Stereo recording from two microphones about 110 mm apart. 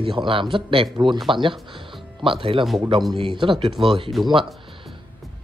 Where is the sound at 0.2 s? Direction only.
50° right (ahead or behind).